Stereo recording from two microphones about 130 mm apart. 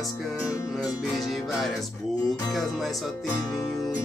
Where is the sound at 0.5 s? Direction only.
30° left (ahead or behind).